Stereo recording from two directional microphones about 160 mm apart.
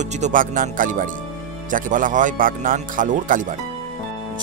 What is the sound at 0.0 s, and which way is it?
Speech, 45° right (ahead or behind).